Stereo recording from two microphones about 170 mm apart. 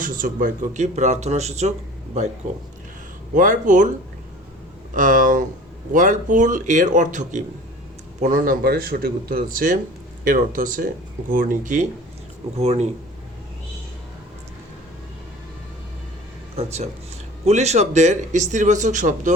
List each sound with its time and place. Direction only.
0.0 s speech: 55° right (ahead or behind)
3.3 s speech: 50° right (ahead or behind)
4.9 s speech: 50° right (ahead or behind)
16.6 s speech: 40° right (ahead or behind)